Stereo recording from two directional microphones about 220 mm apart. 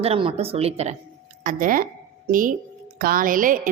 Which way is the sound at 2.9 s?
40° right (ahead or behind).